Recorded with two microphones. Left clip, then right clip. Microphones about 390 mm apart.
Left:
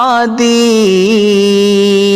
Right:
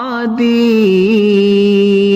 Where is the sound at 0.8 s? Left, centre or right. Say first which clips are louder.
Left 2 dB; left.